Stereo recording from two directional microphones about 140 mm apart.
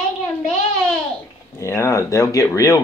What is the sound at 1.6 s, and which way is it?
Speech, 20° left (ahead or behind).